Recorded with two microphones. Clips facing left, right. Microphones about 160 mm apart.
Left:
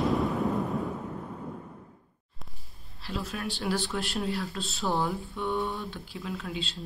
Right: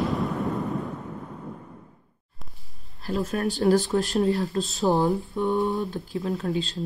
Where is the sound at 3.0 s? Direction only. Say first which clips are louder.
Right 8 dB; 45° right (ahead or behind).